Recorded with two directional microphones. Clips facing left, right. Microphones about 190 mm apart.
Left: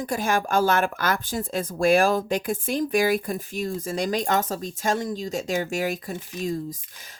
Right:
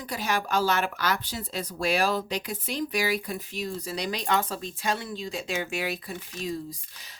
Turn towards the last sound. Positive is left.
turn(degrees=45)  # may be behind; listen again after turning